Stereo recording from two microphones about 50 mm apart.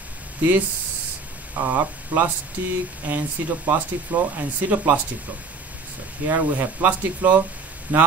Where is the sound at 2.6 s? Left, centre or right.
Right.